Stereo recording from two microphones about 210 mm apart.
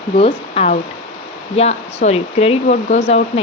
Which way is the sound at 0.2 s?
30° left (ahead or behind).